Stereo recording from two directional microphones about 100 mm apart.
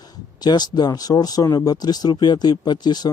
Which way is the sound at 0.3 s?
45° left (ahead or behind).